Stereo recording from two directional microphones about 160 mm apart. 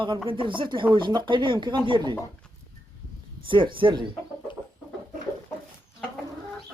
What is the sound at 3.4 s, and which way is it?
Speech, 30° right (ahead or behind).